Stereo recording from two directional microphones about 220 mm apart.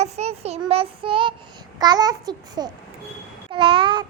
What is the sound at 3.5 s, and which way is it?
Babbling, 25° right (ahead or behind).